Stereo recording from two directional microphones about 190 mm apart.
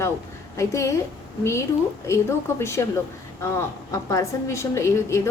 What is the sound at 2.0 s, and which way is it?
A woman's voice, 15° left (ahead or behind).